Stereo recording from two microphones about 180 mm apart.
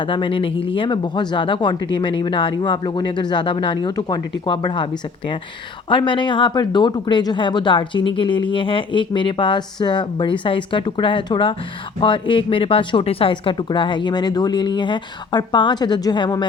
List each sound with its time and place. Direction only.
0.1 s speech: 30° left (ahead or behind)
5.9 s speech: 25° left (ahead or behind)